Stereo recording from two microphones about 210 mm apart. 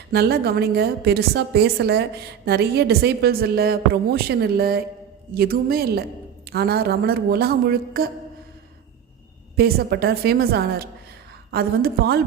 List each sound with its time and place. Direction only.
0.1 s a woman's voice: 50° right (ahead or behind)
9.6 s a woman's voice: 50° right (ahead or behind)